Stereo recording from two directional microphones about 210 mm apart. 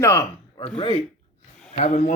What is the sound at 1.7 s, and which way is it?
Speech, 35° left (ahead or behind).